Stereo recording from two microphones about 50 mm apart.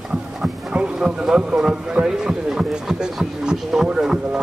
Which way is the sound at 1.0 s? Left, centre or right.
Centre.